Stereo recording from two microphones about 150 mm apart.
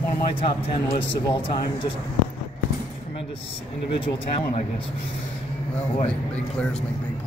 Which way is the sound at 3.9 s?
35° left (ahead or behind).